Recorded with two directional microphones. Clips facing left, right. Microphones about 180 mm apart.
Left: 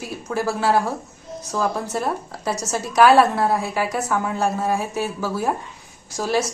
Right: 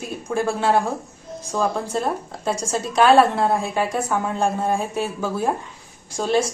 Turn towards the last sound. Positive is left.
turn(degrees=-30)  # may be behind; listen again after turning